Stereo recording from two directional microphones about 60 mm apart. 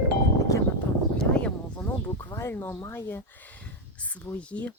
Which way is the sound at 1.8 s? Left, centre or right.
Left.